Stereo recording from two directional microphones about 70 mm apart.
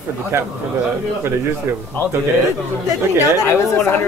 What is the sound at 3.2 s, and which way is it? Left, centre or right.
Speech, left.